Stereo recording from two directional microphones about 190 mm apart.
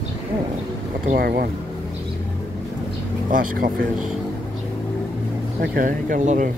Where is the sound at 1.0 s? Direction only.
50° right (ahead or behind).